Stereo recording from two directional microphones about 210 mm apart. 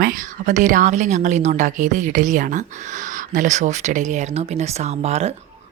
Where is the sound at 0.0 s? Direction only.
40° right (ahead or behind).